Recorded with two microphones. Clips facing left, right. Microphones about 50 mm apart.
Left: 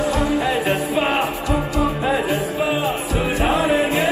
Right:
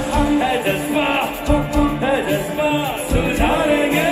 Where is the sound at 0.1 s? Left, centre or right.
Right.